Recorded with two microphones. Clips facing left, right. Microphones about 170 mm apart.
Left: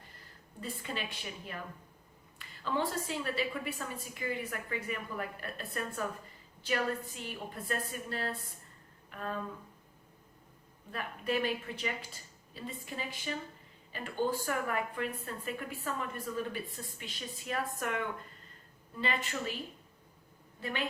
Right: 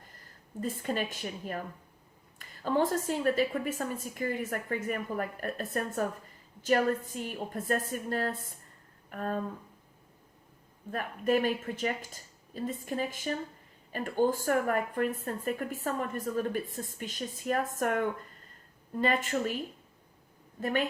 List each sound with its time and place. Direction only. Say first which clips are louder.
0.6 s a woman's voice: right 7 dB; 45° right (ahead or behind)
9.0 s a sound: right 5 dB; 45° right (ahead or behind)
10.9 s a woman's voice: right 6 dB; 45° right (ahead or behind)
20.6 s a woman's voice: right 8 dB; 45° right (ahead or behind)